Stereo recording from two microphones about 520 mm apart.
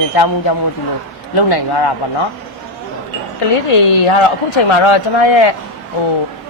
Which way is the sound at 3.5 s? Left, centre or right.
Left.